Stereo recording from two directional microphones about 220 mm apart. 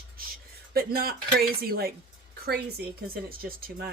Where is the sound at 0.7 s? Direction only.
45° right (ahead or behind).